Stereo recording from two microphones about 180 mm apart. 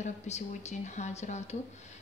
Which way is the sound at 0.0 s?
40° left (ahead or behind).